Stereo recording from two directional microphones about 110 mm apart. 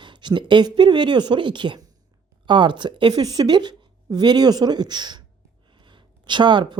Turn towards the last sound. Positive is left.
turn(degrees=-45)  # may be behind; listen again after turning